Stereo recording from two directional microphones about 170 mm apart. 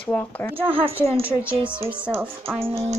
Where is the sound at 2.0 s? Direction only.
10° right (ahead or behind).